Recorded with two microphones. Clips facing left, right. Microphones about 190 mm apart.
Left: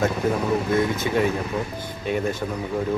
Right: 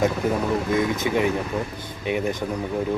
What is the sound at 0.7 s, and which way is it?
Speech, 15° right (ahead or behind).